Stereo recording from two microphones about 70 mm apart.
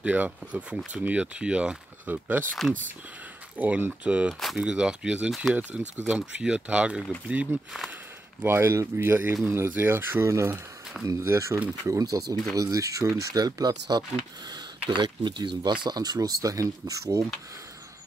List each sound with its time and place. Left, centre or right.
0.0 s speech: right
3.5 s speech: right
8.4 s speech: right
11.8 s speech: right
14.5 s speech: right